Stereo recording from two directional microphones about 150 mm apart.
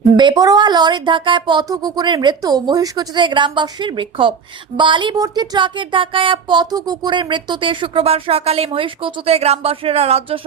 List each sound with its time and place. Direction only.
0.2 s speech: 30° right (ahead or behind)